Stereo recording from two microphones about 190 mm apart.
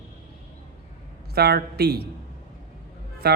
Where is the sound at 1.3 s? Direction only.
55° right (ahead or behind).